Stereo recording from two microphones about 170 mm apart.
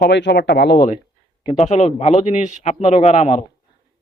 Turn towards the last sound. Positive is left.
turn(degrees=40)  # may be behind; listen again after turning